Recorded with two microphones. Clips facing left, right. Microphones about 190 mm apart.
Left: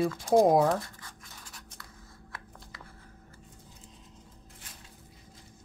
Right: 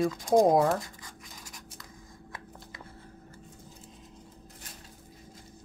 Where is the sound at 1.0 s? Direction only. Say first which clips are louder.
Right 2 dB; 15° right (ahead or behind).